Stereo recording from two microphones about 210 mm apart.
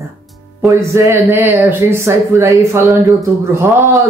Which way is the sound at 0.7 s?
15° right (ahead or behind).